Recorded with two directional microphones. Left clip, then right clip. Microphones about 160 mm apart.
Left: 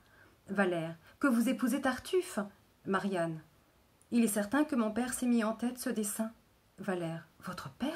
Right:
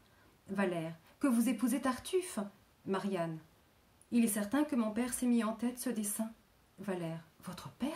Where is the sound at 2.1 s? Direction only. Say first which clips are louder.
Left 3 dB; 10° left (ahead or behind).